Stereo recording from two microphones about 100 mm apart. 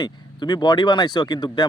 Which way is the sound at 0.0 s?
45° left (ahead or behind).